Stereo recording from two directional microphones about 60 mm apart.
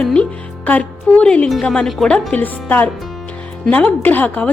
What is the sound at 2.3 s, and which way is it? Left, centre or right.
A woman's voice, left.